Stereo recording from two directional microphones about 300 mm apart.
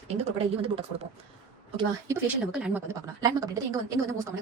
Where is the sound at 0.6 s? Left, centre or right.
Centre.